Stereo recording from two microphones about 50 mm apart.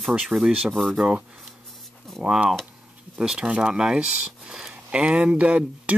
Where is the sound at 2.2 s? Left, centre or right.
Centre.